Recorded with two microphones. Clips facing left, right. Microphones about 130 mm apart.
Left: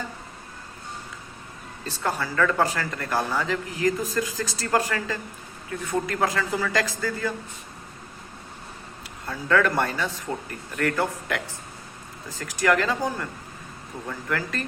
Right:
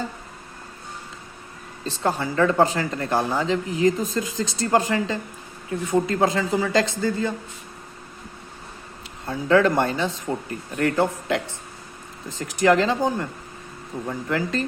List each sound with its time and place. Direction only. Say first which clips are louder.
1.8 s speech: right 4 dB; 25° right (ahead or behind)
9.2 s speech: right 4 dB; 25° right (ahead or behind)